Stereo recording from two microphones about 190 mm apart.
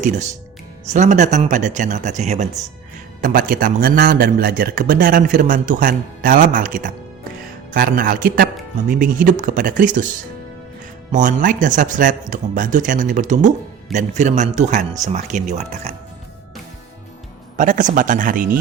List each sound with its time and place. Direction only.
0.9 s a man's voice: 40° right (ahead or behind)
11.1 s a man's voice: 40° right (ahead or behind)
17.6 s a man's voice: 45° right (ahead or behind)